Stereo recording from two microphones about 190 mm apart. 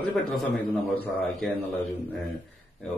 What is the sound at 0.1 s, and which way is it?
Speech, centre (ahead or behind).